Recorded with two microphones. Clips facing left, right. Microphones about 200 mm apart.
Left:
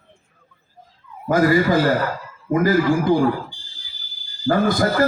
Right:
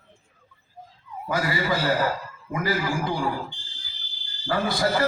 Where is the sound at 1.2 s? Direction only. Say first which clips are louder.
Left 9 dB; 50° left (ahead or behind).